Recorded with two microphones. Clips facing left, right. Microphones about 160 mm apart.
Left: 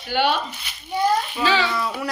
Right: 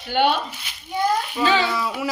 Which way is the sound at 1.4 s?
15° right (ahead or behind).